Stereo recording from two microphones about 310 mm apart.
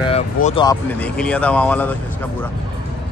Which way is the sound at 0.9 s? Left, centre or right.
Centre.